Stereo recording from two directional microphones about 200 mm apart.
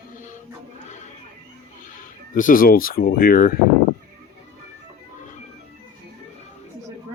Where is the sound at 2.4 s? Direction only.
45° left (ahead or behind).